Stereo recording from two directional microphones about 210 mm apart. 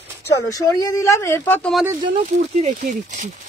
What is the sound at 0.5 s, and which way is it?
Speech, 15° left (ahead or behind).